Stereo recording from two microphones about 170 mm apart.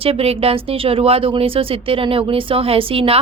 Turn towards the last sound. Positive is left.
turn(degrees=-35)  # may be behind; listen again after turning